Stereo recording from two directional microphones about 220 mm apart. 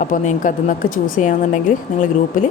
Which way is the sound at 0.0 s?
35° left (ahead or behind).